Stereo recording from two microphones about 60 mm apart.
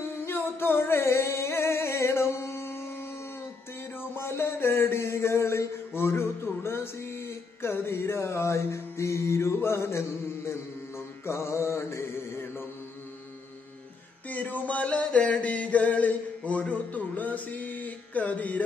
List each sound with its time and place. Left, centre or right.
0.2 s singing: left
4.0 s mantra: left
14.3 s music: left